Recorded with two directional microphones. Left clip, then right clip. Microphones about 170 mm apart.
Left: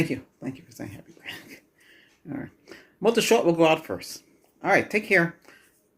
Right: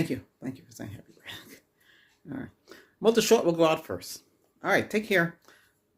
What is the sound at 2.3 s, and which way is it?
Speech, 25° right (ahead or behind).